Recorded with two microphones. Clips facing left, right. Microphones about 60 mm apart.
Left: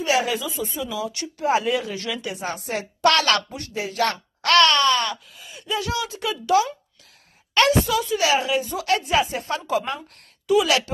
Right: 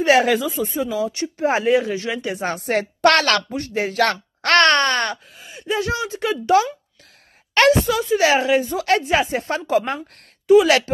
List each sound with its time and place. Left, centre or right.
0.0 s a woman's voice: right
7.5 s a woman's voice: right